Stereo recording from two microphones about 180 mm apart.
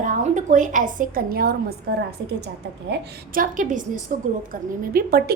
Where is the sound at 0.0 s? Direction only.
45° right (ahead or behind).